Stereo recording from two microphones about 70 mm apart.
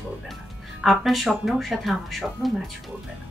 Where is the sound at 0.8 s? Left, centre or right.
Centre.